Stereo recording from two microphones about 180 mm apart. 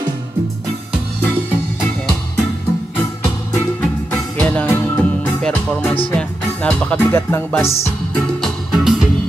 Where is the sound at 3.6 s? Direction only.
10° left (ahead or behind).